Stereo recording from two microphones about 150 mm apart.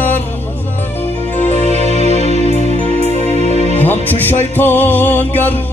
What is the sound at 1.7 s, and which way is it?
Music, 45° right (ahead or behind).